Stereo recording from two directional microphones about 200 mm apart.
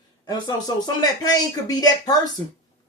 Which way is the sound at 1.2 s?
20° left (ahead or behind).